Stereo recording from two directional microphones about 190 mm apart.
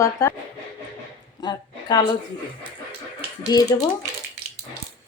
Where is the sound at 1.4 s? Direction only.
20° left (ahead or behind).